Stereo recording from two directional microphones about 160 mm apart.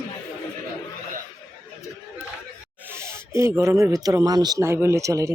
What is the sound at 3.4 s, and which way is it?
Speech, 15° right (ahead or behind).